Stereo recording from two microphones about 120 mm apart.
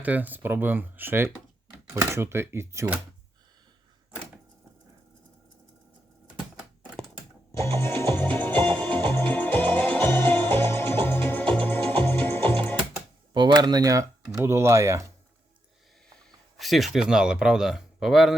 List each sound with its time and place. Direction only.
0.0 s speech: 15° right (ahead or behind)
7.8 s music: 20° left (ahead or behind)
13.3 s speech: 40° right (ahead or behind)
16.6 s speech: centre (ahead or behind)